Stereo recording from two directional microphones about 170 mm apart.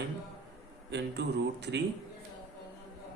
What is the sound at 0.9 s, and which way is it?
Speech, 90° right.